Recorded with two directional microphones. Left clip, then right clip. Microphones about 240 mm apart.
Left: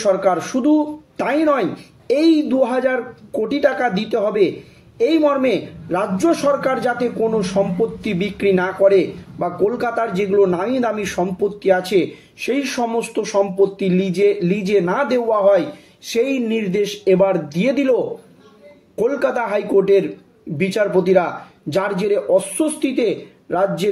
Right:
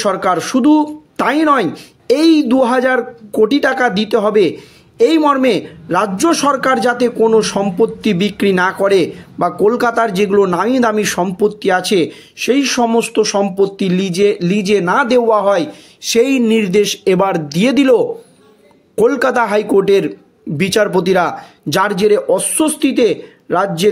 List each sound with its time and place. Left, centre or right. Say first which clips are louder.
0.0 s a man's voice: right 2 dB; right